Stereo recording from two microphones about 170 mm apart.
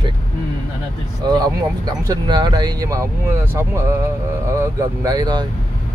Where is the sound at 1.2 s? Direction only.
25° right (ahead or behind).